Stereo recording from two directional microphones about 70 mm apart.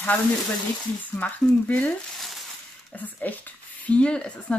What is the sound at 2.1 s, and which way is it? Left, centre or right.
Speech, centre.